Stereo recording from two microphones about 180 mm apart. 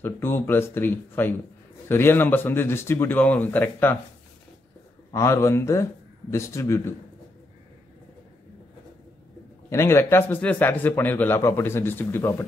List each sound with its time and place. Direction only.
0.0 s speech: 10° left (ahead or behind)
5.1 s speech: 15° left (ahead or behind)
9.7 s speech: 15° left (ahead or behind)